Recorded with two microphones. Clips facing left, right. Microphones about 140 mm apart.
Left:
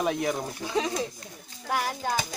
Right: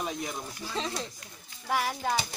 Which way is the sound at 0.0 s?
65° left (ahead or behind).